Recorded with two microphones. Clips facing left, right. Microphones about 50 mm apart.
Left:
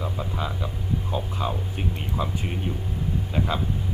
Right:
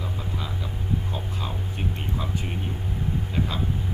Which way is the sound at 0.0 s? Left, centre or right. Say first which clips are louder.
Left 3 dB; centre.